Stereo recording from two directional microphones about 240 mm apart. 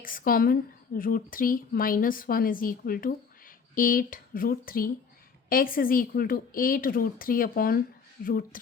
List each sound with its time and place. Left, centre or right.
0.0 s speech: left